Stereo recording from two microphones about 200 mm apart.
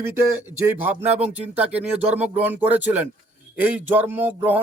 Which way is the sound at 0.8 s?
10° right (ahead or behind).